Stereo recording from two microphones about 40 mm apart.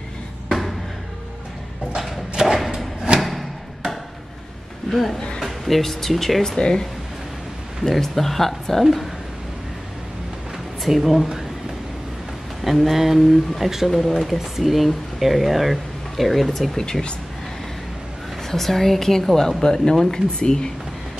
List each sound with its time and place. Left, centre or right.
0.5 s music: centre
2.3 s a sound: centre
3.2 s music: centre
4.8 s a woman's voice: centre
7.9 s speech: centre
10.8 s speech: centre
12.6 s speech: centre
16.7 s speech: centre
18.5 s speech: centre